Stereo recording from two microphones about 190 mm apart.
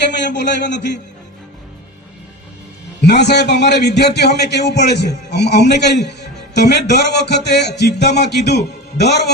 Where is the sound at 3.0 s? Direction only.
65° left (ahead or behind).